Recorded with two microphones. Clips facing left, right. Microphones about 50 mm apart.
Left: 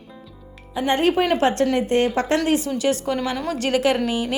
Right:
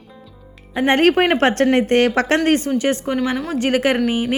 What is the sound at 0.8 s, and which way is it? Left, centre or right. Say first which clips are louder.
Speech: right 4 dB; right.